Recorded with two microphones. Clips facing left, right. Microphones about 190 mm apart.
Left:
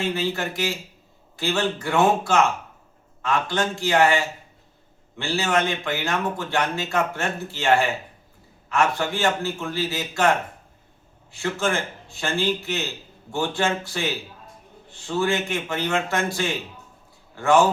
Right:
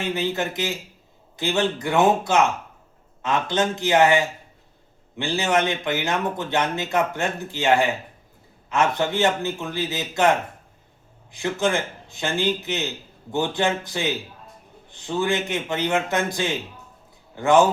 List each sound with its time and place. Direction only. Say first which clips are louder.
0.0 s a man's voice: right 1 dB; 20° right (ahead or behind)